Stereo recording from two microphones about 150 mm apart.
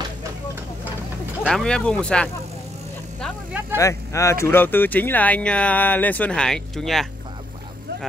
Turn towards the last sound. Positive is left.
turn(degrees=0)  # may be behind; listen again after turning